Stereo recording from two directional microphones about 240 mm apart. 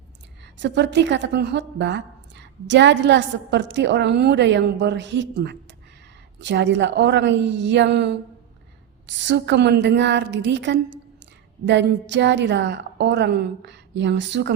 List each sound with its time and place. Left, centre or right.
0.5 s a woman's voice: right